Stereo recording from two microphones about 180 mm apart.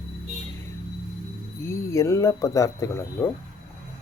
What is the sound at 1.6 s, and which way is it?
Speech, 15° left (ahead or behind).